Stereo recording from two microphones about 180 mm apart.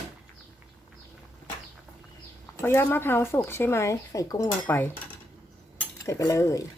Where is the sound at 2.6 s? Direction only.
15° left (ahead or behind).